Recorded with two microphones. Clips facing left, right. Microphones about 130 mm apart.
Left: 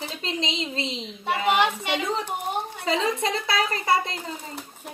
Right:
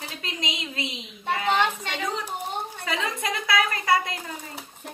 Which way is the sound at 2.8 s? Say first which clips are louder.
Left 5 dB; 25° left (ahead or behind).